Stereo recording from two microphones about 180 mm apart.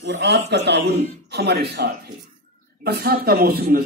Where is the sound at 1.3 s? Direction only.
65° right (ahead or behind).